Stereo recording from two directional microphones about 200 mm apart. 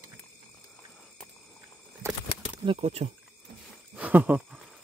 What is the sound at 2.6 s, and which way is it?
Speech, 30° right (ahead or behind).